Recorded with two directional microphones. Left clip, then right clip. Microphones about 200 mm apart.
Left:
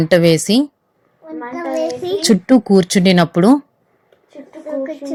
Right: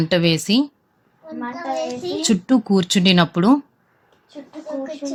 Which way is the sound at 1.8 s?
15° left (ahead or behind).